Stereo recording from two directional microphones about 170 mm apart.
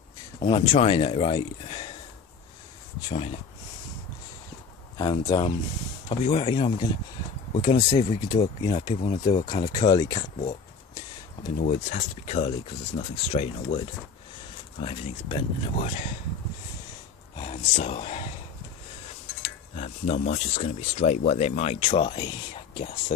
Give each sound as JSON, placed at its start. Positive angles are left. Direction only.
{"t": 0.4, "sound": "speech", "side_deg": 35}
{"t": 3.1, "sound": "speech", "side_deg": 35}
{"t": 4.9, "sound": "speech", "side_deg": 25}
{"t": 11.6, "sound": "speech", "side_deg": 40}
{"t": 14.8, "sound": "speech", "side_deg": 35}
{"t": 17.4, "sound": "speech", "side_deg": 35}
{"t": 19.4, "sound": "speech", "side_deg": 35}